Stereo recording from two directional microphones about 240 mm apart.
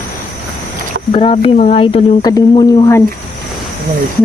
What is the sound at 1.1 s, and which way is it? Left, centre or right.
Speech, left.